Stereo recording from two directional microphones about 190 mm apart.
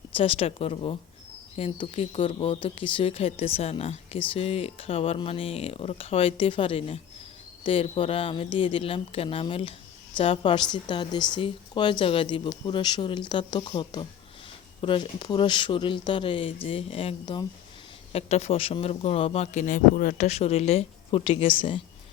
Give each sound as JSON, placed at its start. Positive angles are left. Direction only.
{"t": 0.1, "sound": "speech", "side_deg": 30}
{"t": 20.2, "sound": "speech", "side_deg": 35}